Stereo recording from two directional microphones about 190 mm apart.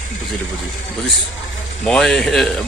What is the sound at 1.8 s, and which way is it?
Speech, 5° left (ahead or behind).